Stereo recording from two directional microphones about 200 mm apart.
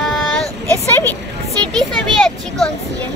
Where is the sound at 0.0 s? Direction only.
5° left (ahead or behind).